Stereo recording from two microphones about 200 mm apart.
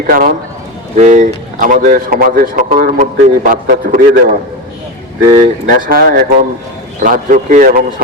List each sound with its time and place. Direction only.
0.1 s a man's voice: 45° right (ahead or behind)
5.3 s a man's voice: 40° right (ahead or behind)